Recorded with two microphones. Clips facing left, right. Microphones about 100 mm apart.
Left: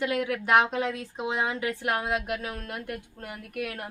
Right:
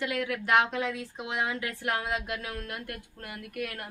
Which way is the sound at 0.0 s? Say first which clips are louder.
Left 3 dB; 25° left (ahead or behind).